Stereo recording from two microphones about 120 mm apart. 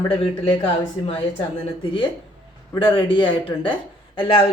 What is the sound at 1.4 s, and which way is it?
Speech, 45° left (ahead or behind).